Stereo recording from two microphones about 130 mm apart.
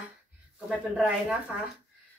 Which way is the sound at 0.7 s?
10° right (ahead or behind).